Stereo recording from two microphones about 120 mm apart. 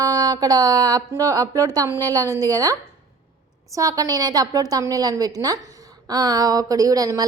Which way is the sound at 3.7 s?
30° right (ahead or behind).